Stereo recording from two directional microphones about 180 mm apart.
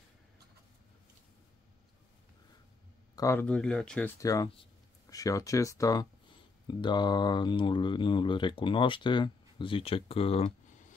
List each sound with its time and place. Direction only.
3.2 s speech: 15° left (ahead or behind)
4.2 s speech: 20° left (ahead or behind)